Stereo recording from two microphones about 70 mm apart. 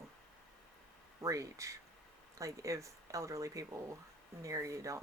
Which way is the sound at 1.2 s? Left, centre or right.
Right.